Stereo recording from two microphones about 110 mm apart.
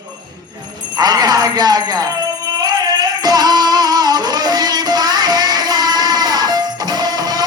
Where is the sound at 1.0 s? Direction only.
35° right (ahead or behind).